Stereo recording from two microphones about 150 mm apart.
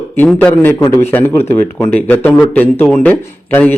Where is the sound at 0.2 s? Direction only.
10° left (ahead or behind).